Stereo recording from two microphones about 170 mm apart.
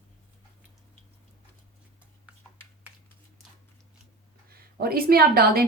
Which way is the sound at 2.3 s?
5° right (ahead or behind).